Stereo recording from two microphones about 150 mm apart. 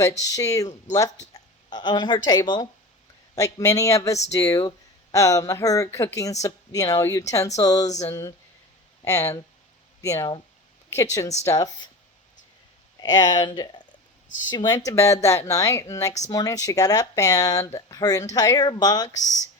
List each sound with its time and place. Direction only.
0.2 s speech: 25° left (ahead or behind)
13.0 s speech: 25° left (ahead or behind)